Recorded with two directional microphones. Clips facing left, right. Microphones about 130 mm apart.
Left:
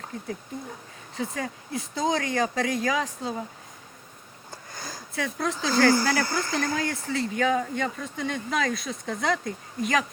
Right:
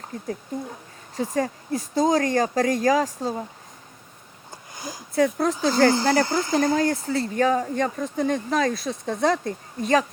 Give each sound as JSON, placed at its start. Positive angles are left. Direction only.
{"t": 1.1, "sound": "speech", "side_deg": -40}
{"t": 4.5, "sound": "a sound", "side_deg": -15}
{"t": 5.1, "sound": "speech", "side_deg": -35}
{"t": 5.7, "sound": "speech", "side_deg": -25}
{"t": 6.7, "sound": "speech", "side_deg": -40}